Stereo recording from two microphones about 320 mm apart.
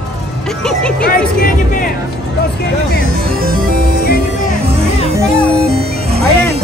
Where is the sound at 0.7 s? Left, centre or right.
Centre.